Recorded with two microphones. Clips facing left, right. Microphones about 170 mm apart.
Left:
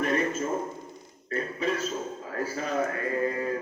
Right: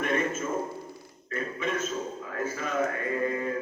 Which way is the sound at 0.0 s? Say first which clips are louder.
Left 1 dB; 35° left (ahead or behind).